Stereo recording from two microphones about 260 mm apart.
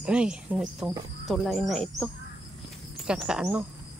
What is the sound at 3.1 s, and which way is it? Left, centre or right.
Speech, centre.